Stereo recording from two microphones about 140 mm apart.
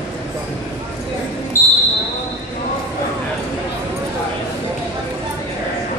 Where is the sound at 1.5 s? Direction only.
85° left.